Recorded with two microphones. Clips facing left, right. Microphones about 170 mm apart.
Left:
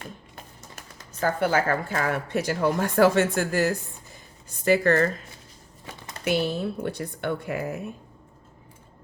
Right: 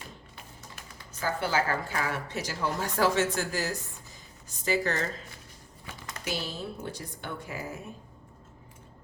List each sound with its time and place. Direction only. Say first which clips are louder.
1.2 s a woman's voice: left 6 dB; 55° left (ahead or behind)
6.2 s a woman's voice: left 10 dB; 60° left (ahead or behind)